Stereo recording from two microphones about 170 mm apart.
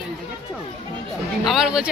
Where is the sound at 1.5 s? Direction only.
5° right (ahead or behind).